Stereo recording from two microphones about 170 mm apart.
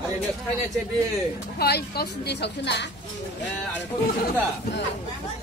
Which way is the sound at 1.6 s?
70° left (ahead or behind).